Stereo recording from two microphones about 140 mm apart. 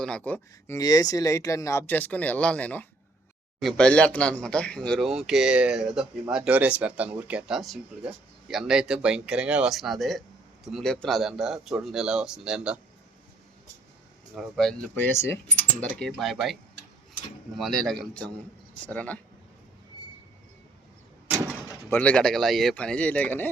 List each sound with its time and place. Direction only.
0.0 s speech: 10° left (ahead or behind)
0.8 s speech: 25° left (ahead or behind); by 12.8 s 5° right (ahead or behind)
14.3 s speech: centre (ahead or behind); by 15.4 s 20° left (ahead or behind)
15.8 s speech: 5° left (ahead or behind)
17.6 s speech: 5° left (ahead or behind)
21.3 s door: 15° right (ahead or behind)
21.8 s speech: 10° left (ahead or behind)